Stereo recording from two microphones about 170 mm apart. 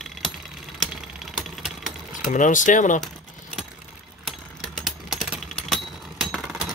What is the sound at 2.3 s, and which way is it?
Speech, 50° left (ahead or behind).